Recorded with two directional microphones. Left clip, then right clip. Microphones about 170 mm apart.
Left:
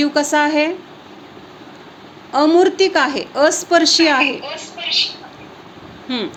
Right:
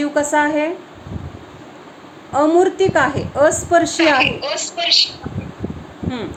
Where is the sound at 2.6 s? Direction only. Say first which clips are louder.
Left 1 dB; 45° left (ahead or behind).